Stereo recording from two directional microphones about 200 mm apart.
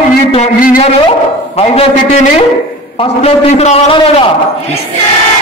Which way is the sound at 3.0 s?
30° left (ahead or behind).